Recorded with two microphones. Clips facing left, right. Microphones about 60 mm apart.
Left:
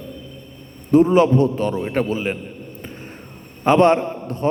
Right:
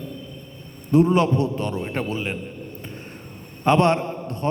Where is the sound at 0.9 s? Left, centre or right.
Centre.